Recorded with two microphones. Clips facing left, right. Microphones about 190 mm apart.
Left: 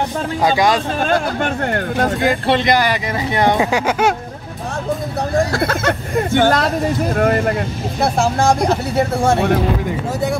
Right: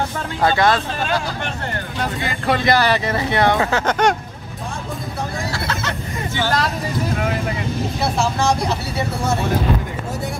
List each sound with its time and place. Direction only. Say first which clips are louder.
0.4 s speech: left 1 dB; 15° left (ahead or behind)
1.0 s speech: left 5 dB; 50° left (ahead or behind)
2.4 s speech: right 3 dB; 20° left (ahead or behind)
5.5 s speech: left 7 dB; 55° left (ahead or behind)